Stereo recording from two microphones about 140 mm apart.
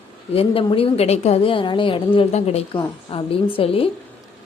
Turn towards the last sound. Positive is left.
turn(degrees=40)  # may be behind; listen again after turning